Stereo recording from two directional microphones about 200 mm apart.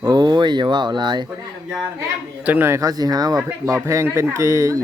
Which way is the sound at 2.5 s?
10° right (ahead or behind).